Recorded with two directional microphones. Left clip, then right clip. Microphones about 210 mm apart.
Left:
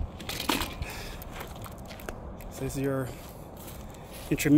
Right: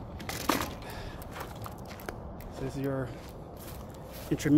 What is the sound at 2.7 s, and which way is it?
Speech, 50° left (ahead or behind).